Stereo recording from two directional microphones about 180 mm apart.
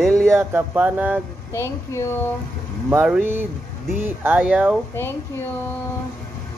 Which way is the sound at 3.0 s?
10° right (ahead or behind).